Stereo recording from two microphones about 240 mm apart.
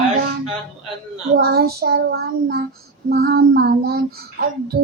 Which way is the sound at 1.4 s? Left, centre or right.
Right.